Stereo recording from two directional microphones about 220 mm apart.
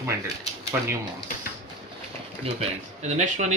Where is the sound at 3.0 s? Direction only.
30° right (ahead or behind).